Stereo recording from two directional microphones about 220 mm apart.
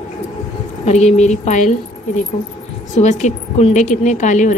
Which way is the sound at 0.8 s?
30° left (ahead or behind).